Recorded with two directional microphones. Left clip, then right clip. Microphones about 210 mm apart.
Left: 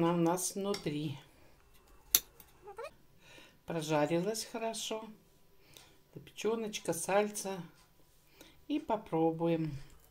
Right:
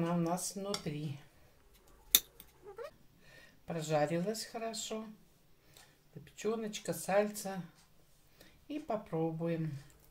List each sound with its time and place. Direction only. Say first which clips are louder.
0.0 s speech: left 5 dB; 35° left (ahead or behind)
3.3 s speech: left 2 dB; 35° left (ahead or behind)
6.4 s speech: left 2 dB; 30° left (ahead or behind)
8.6 s speech: left 4 dB; 35° left (ahead or behind)